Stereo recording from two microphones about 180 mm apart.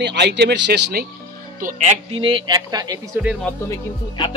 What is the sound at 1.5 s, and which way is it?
Speech, 45° right (ahead or behind).